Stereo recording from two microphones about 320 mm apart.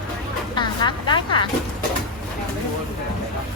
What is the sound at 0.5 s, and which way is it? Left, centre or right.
Speech, centre.